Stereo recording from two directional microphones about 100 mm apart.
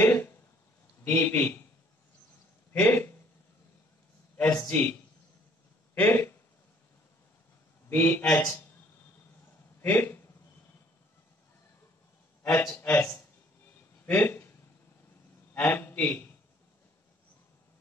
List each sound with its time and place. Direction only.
0.0 s a sound: 25° left (ahead or behind)
1.0 s a man's voice: 20° left (ahead or behind)
2.7 s speech: 20° left (ahead or behind)
4.6 s a man's voice: 20° left (ahead or behind)
5.9 s speech: 20° left (ahead or behind)
7.9 s a man's voice: 20° left (ahead or behind)
9.8 s a sound: 20° left (ahead or behind)
12.4 s a man's voice: 25° left (ahead or behind)
15.5 s a man's voice: 20° left (ahead or behind)